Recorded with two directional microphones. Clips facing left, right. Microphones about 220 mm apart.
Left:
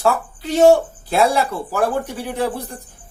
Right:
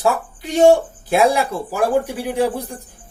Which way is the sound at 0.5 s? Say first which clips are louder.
Even; 10° right (ahead or behind).